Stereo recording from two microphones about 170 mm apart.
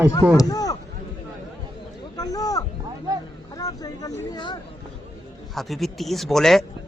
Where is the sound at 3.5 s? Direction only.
20° left (ahead or behind).